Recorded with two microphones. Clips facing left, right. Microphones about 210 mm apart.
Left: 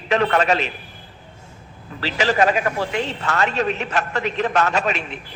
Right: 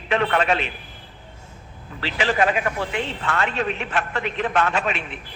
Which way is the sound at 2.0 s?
40° left (ahead or behind).